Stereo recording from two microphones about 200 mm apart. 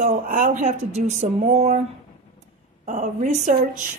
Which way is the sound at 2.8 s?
35° right (ahead or behind).